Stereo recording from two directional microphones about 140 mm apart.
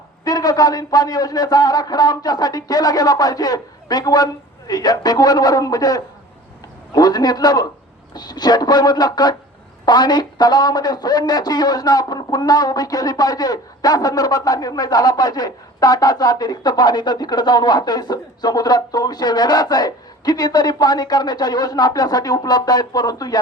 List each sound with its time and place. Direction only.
0.3 s a man's voice: 25° left (ahead or behind)